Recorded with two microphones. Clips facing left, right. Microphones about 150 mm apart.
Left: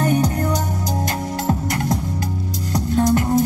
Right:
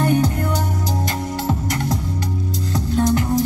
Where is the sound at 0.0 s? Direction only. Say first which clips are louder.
Right 1 dB; 40° left (ahead or behind).